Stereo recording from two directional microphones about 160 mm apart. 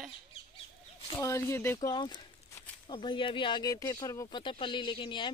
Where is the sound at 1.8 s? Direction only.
25° left (ahead or behind).